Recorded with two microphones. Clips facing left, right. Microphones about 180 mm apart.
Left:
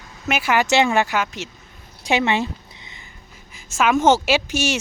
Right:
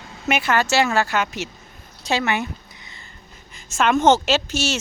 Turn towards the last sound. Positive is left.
turn(degrees=15)  # may be behind; listen again after turning